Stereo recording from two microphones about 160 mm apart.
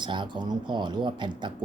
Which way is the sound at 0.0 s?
30° right (ahead or behind).